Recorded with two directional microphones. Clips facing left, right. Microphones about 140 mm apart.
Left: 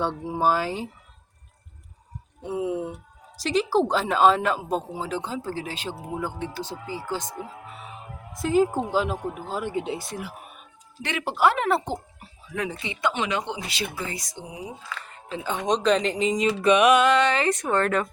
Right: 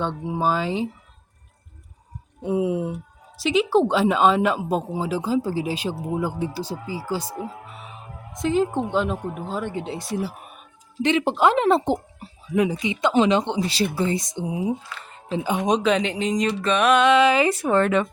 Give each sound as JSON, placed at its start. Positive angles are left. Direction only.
{"t": 0.0, "sound": "speech", "side_deg": 5}
{"t": 2.4, "sound": "speech", "side_deg": -15}
{"t": 3.3, "sound": "speech", "side_deg": 0}
{"t": 8.3, "sound": "speech", "side_deg": 5}
{"t": 9.7, "sound": "speech", "side_deg": 15}
{"t": 11.0, "sound": "speech", "side_deg": -20}
{"t": 15.4, "sound": "speech", "side_deg": -10}
{"t": 17.1, "sound": "speech", "side_deg": -5}